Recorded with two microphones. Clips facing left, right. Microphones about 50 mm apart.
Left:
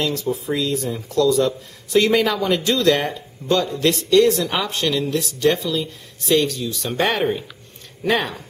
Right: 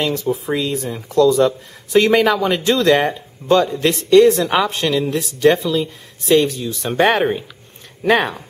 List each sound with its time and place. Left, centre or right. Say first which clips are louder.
0.0 s speech: right 3 dB; right